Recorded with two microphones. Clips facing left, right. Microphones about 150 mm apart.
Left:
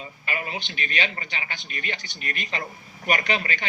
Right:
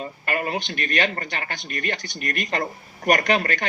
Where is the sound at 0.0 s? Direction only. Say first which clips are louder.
Right 6 dB; 55° right (ahead or behind).